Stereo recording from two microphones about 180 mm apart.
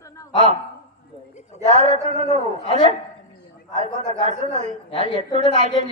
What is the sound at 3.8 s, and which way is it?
Speech, 40° right (ahead or behind).